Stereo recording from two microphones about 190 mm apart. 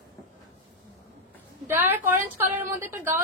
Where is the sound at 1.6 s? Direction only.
10° right (ahead or behind).